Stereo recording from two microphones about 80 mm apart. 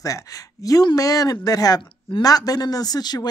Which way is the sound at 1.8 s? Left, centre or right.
Left.